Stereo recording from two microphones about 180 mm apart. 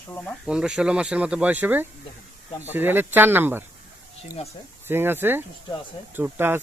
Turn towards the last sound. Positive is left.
turn(degrees=-10)  # may be behind; listen again after turning